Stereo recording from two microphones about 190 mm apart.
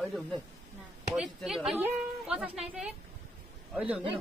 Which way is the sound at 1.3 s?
Centre (ahead or behind).